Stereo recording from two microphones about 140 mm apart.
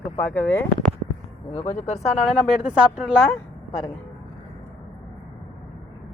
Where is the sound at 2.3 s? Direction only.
5° right (ahead or behind).